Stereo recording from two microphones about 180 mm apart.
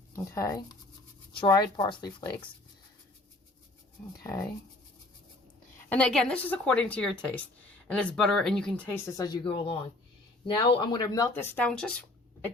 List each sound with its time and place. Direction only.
0.3 s speech: 20° left (ahead or behind)
5.9 s speech: 5° left (ahead or behind)
11.5 s speech: 5° left (ahead or behind)